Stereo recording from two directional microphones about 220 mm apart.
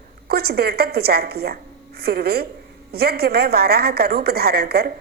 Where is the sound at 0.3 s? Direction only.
45° right (ahead or behind).